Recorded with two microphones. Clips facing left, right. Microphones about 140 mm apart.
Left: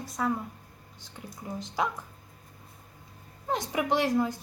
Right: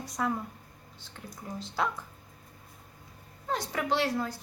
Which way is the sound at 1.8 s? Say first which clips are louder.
Left 1 dB; 15° left (ahead or behind).